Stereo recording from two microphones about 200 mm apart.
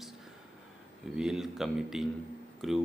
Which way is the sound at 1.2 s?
5° right (ahead or behind).